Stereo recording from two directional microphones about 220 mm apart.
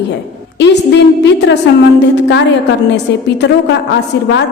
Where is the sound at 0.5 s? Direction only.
55° left (ahead or behind).